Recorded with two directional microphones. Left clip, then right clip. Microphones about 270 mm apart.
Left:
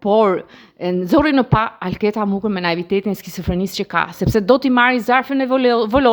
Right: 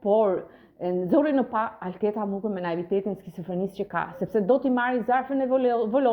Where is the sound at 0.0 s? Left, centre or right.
Left.